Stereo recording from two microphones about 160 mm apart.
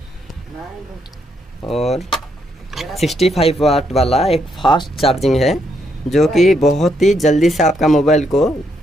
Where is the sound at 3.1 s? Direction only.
40° left (ahead or behind).